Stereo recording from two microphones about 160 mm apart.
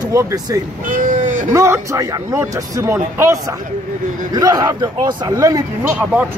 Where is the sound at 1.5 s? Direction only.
15° right (ahead or behind).